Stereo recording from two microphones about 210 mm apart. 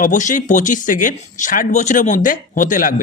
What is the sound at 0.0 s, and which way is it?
Speech, 35° left (ahead or behind).